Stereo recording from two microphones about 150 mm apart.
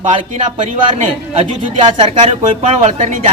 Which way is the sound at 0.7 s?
50° right (ahead or behind).